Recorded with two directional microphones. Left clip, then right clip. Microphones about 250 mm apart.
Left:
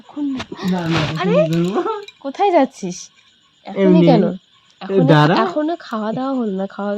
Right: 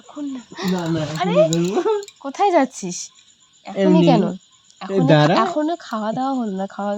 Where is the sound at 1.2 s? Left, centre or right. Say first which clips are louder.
Even; centre.